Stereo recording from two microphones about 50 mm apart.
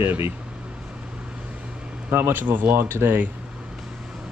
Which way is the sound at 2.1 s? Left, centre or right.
Right.